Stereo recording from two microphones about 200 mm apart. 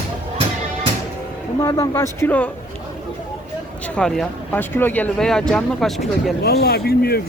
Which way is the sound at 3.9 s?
5° left (ahead or behind).